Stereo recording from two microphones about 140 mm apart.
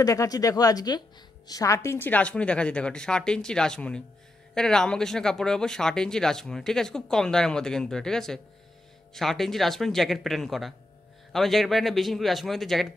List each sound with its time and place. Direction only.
0.0 s a woman's voice: 25° left (ahead or behind); by 12.8 s centre (ahead or behind)